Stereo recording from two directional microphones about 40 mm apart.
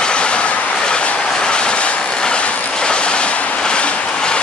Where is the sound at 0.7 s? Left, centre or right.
Left.